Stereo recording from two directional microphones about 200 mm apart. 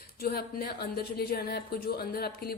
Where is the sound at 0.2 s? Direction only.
50° left (ahead or behind).